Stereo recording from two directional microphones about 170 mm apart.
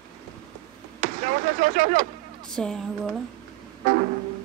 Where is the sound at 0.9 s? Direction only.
50° right (ahead or behind).